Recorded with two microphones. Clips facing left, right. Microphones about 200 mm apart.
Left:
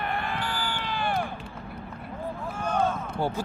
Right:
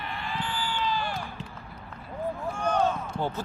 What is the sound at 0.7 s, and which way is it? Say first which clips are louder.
Run: right 1 dB; 60° left (ahead or behind).